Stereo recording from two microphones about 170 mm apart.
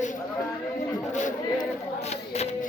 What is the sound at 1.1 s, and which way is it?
Speech, 50° left (ahead or behind).